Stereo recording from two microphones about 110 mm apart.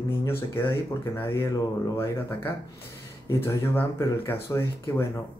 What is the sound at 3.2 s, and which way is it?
Speech, 20° left (ahead or behind).